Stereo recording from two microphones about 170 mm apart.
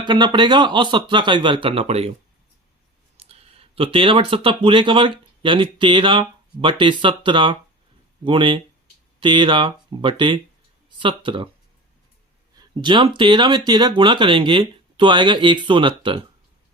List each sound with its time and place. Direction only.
0.0 s speech: 25° right (ahead or behind)
3.2 s speech: 35° right (ahead or behind)
12.8 s speech: 30° right (ahead or behind)